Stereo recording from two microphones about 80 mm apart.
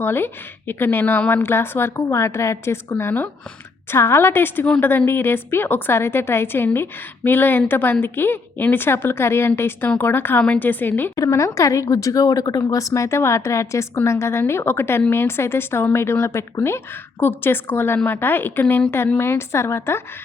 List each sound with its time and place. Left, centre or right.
0.0 s a woman's voice: left
3.0 s a woman's voice: left
11.2 s a woman's voice: left